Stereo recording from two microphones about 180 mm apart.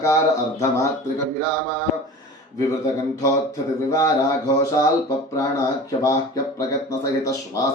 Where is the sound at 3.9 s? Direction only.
20° left (ahead or behind).